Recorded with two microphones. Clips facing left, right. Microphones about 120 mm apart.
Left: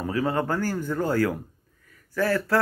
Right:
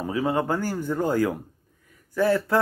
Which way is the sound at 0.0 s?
15° right (ahead or behind).